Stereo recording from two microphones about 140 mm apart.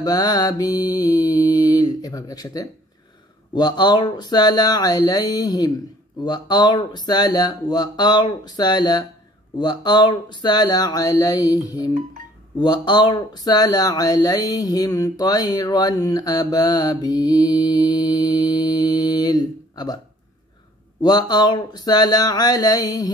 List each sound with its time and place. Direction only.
0.0 s speech: 30° left (ahead or behind)
21.0 s speech: 30° left (ahead or behind)